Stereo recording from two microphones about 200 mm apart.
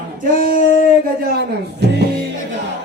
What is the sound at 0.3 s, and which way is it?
Female singing, 45° right (ahead or behind).